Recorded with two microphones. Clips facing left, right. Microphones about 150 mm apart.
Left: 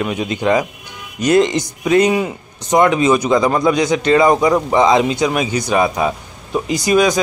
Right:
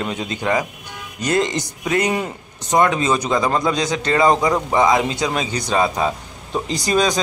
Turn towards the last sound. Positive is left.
turn(degrees=10)  # may be behind; listen again after turning